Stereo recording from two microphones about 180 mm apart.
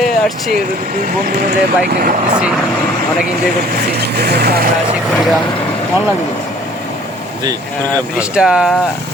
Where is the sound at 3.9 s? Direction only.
65° right (ahead or behind).